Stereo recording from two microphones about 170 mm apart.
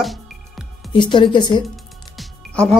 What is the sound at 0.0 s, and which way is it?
Music, centre (ahead or behind).